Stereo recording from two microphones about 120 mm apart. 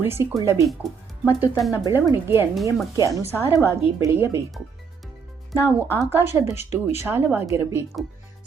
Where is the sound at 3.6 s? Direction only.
20° right (ahead or behind).